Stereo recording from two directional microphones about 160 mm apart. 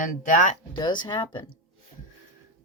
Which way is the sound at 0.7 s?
30° left (ahead or behind).